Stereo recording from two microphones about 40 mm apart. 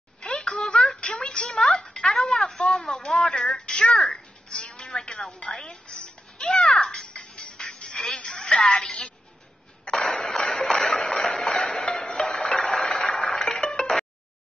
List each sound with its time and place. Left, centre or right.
0.4 s a sound: centre
3.0 s music: centre
3.8 s a child's voice: left
4.1 s music: centre
5.5 s a child's voice: centre
6.9 s music: centre
9.9 s a sound: centre
13.2 s music: centre